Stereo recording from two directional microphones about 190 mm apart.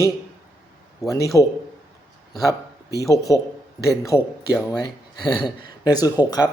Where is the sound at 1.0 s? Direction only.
15° left (ahead or behind).